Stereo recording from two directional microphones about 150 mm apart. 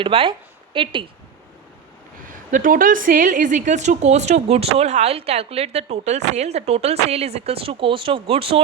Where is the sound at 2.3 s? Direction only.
65° right (ahead or behind).